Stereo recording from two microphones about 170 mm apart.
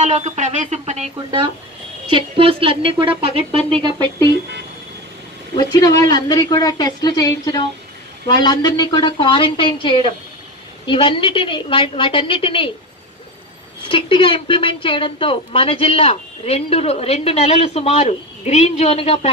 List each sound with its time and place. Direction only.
0.0 s speech: 45° right (ahead or behind)
2.0 s a woman's voice: 30° right (ahead or behind)
5.6 s a woman's voice: 25° left (ahead or behind)
13.8 s a woman's voice: 30° left (ahead or behind)